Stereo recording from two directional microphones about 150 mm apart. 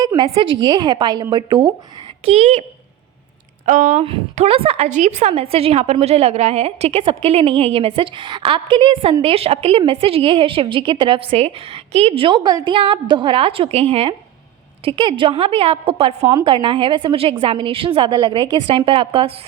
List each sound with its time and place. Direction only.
0.2 s a woman's voice: 35° right (ahead or behind)
2.2 s speech: 45° right (ahead or behind)
3.7 s speech: 55° right (ahead or behind)
4.0 s a woman's voice: 40° right (ahead or behind)